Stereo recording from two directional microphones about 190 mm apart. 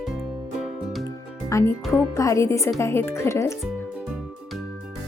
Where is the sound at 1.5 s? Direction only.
15° left (ahead or behind).